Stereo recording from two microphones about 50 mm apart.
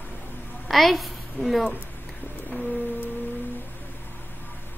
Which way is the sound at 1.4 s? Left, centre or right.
Left.